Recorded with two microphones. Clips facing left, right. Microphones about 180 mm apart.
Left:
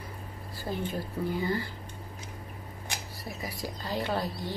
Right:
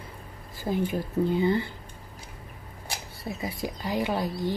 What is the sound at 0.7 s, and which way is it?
Speech, 15° right (ahead or behind).